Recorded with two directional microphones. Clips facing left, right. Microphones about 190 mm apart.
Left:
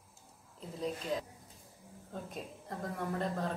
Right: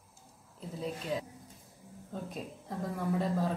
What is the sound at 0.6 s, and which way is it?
Speech, 5° right (ahead or behind).